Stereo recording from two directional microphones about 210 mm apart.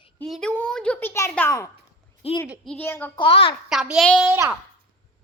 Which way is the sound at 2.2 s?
30° left (ahead or behind).